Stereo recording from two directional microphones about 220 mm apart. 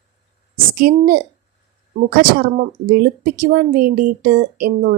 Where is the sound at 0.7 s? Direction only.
40° right (ahead or behind).